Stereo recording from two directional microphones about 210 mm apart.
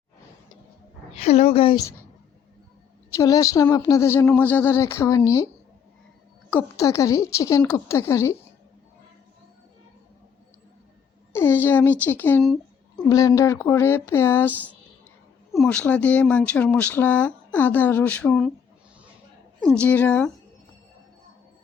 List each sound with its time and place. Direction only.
1.1 s a woman's voice: 30° left (ahead or behind)
3.2 s speech: 15° left (ahead or behind)
6.5 s speech: 15° left (ahead or behind)
11.3 s a child's voice: 10° left (ahead or behind)
13.1 s speech: 15° left (ahead or behind)
19.6 s speech: 5° left (ahead or behind)